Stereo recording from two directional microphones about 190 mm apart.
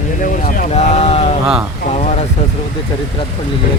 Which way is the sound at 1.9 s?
35° left (ahead or behind).